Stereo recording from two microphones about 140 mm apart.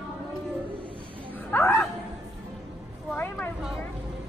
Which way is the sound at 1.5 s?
20° left (ahead or behind).